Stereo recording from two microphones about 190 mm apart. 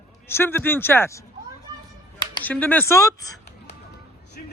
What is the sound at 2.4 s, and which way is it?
Speech, 10° left (ahead or behind).